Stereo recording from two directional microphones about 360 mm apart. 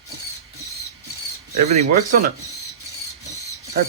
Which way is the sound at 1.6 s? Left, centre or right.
Centre.